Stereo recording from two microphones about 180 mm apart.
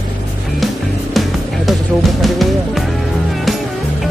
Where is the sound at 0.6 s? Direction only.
Centre (ahead or behind).